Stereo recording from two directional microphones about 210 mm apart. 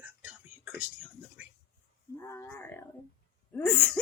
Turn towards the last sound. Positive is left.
turn(degrees=5)  # may be behind; listen again after turning